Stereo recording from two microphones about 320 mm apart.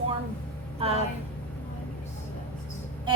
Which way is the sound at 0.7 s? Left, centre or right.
Centre.